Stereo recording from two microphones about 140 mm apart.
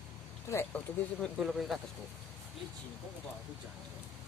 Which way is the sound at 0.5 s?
15° left (ahead or behind).